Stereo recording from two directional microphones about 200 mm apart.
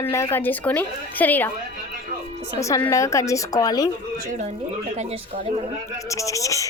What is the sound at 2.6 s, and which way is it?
Speech, 15° left (ahead or behind).